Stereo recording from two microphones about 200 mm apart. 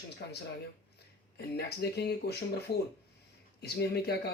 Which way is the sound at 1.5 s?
55° left (ahead or behind).